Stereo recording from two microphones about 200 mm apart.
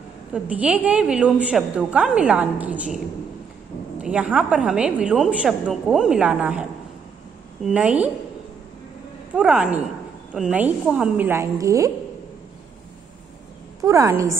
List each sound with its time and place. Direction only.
0.3 s a woman's voice: 5° right (ahead or behind)
4.0 s a woman's voice: 5° right (ahead or behind)
9.3 s a woman's voice: 5° right (ahead or behind)
13.7 s a woman's voice: 15° right (ahead or behind)